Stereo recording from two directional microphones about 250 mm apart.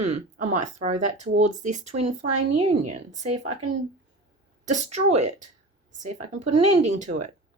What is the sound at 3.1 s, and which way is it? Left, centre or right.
Speech, right.